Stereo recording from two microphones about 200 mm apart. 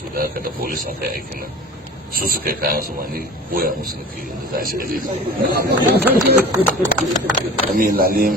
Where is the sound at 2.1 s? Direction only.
50° right (ahead or behind).